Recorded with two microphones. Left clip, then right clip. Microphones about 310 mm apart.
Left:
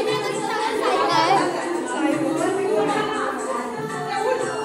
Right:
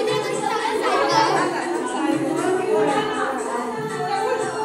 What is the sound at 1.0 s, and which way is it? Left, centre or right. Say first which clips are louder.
Music: left 1 dB; centre.